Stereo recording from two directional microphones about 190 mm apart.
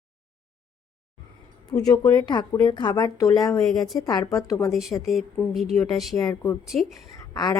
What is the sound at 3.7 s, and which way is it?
Speech, centre (ahead or behind).